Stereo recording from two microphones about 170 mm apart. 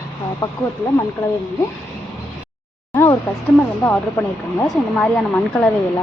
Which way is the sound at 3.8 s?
10° left (ahead or behind).